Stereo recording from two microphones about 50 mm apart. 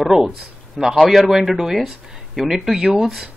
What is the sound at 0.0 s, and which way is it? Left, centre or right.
Speech, centre.